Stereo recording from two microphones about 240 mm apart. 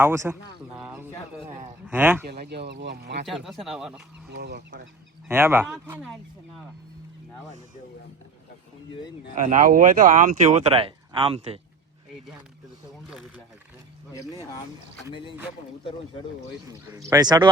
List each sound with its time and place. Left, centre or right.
0.0 s speech: centre
2.2 s speech: right
3.2 s speech: centre
4.3 s speech: right
5.3 s speech: centre
9.3 s speech: right
13.1 s speech: centre
15.1 s speech: left
17.1 s speech: centre